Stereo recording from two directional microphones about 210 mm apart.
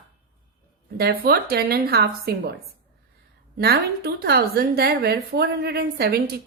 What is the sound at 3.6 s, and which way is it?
A woman's voice, 50° right (ahead or behind).